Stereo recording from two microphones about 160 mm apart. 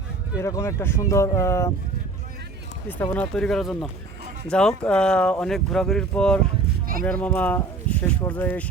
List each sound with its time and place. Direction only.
0.3 s speech: 20° left (ahead or behind)
3.0 s speech: 10° left (ahead or behind)